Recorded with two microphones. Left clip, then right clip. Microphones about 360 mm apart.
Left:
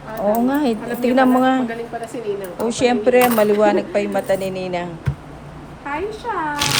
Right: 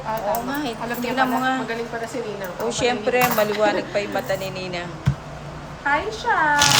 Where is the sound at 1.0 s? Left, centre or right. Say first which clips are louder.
Left 6 dB; centre.